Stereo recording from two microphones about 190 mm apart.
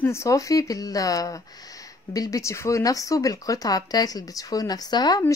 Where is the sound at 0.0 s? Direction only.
15° left (ahead or behind).